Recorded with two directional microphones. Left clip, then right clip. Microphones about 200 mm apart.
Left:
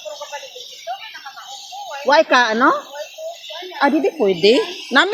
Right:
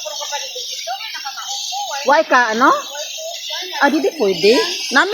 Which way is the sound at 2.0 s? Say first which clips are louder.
Even; 5° left (ahead or behind).